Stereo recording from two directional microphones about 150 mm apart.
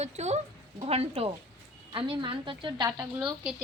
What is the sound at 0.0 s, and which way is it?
A woman's voice, 45° right (ahead or behind).